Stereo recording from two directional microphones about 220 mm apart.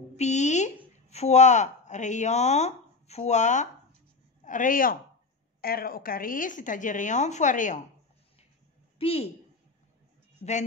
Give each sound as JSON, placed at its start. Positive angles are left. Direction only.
{"t": 0.2, "sound": "a sound", "side_deg": 30}
{"t": 0.9, "sound": "a woman's voice", "side_deg": 30}
{"t": 8.9, "sound": "a woman's voice", "side_deg": 25}